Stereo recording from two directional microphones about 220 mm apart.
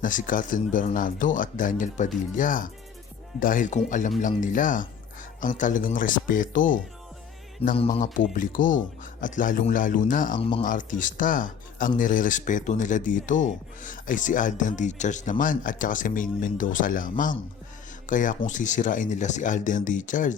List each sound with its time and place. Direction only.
0.0 s speech: 35° left (ahead or behind)